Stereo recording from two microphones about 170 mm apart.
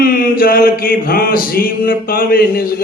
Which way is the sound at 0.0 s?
60° left (ahead or behind).